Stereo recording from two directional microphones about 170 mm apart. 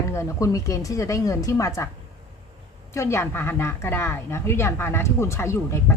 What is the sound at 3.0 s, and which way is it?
A woman's voice, 15° left (ahead or behind).